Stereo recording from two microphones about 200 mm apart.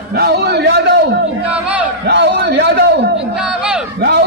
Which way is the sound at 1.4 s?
5° right (ahead or behind).